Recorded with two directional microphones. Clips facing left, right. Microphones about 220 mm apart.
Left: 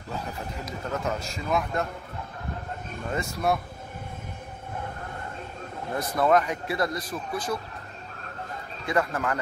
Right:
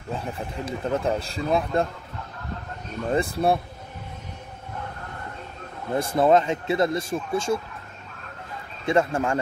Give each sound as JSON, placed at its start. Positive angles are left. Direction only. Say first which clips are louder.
{"t": 0.7, "sound": "a man's voice", "louder": "right 6 dB", "side_deg": -30}
{"t": 3.1, "sound": "a man's voice", "louder": "right 5 dB", "side_deg": -30}
{"t": 5.9, "sound": "speech", "louder": "right 4 dB", "side_deg": -25}
{"t": 8.8, "sound": "speech", "louder": "right 5 dB", "side_deg": -25}